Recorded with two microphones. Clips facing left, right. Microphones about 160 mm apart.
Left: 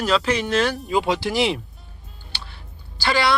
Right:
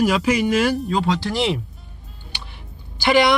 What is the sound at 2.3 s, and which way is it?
Music, 15° right (ahead or behind).